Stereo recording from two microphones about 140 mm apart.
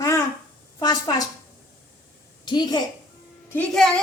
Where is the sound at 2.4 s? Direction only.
30° left (ahead or behind).